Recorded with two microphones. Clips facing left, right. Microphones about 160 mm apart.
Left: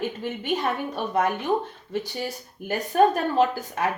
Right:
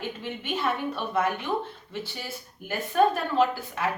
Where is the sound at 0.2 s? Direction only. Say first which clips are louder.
Left 4 dB; 40° left (ahead or behind).